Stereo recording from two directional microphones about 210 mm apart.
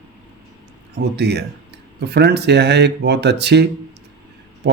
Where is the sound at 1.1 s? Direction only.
55° right (ahead or behind).